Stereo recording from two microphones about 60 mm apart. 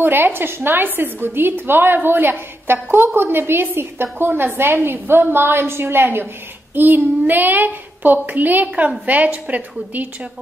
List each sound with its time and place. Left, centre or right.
0.0 s a woman's voice: right